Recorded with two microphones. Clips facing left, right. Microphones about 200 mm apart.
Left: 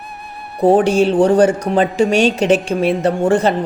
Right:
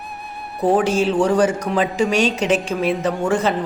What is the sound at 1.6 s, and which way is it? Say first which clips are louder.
Speech: left 4 dB; 55° left (ahead or behind).